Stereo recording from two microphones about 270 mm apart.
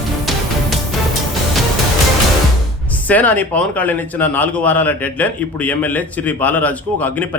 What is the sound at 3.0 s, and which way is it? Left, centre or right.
Speech, centre.